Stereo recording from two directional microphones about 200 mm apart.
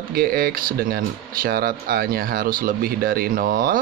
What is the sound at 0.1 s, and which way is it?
Speech, 50° right (ahead or behind).